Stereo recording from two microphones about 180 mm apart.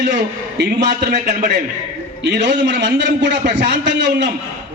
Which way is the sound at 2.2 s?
70° right (ahead or behind).